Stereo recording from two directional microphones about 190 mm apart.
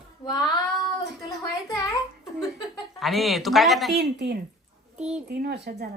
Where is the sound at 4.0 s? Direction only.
60° right (ahead or behind).